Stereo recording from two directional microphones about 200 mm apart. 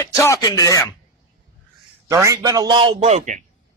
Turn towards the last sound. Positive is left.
turn(degrees=-35)  # may be behind; listen again after turning